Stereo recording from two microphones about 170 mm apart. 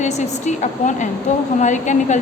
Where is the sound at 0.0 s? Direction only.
45° left (ahead or behind).